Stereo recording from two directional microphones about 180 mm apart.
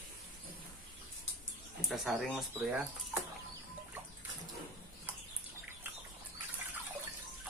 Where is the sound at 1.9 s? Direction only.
Centre (ahead or behind).